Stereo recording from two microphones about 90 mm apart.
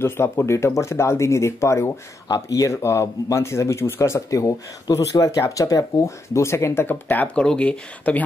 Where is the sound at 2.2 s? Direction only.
45° left (ahead or behind).